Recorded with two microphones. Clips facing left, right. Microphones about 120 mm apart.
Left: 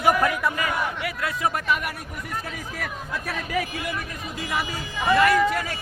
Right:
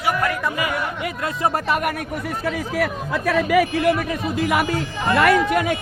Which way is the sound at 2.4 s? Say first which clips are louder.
Right 11 dB; 75° right (ahead or behind).